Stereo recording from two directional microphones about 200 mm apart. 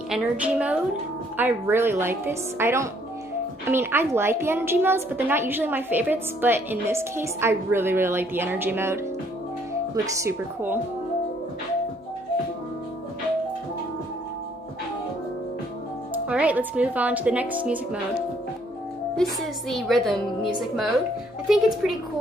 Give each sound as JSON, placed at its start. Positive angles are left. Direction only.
{"t": 0.1, "sound": "a woman's voice", "side_deg": -5}
{"t": 10.1, "sound": "a woman's voice", "side_deg": -10}
{"t": 16.3, "sound": "a woman's voice", "side_deg": -5}
{"t": 19.2, "sound": "a woman's voice", "side_deg": 5}